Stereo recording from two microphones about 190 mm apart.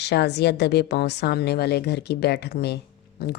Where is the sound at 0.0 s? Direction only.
60° left (ahead or behind).